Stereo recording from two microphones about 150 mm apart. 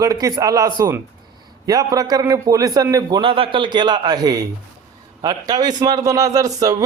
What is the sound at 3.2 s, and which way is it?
A man's voice, 35° right (ahead or behind).